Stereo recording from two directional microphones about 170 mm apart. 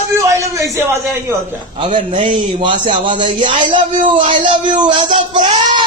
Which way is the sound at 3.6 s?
50° right (ahead or behind).